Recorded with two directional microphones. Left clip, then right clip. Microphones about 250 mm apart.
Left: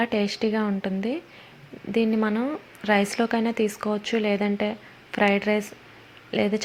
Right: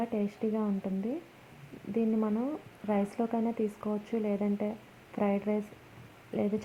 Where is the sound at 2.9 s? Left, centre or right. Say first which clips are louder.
Left 9 dB; left.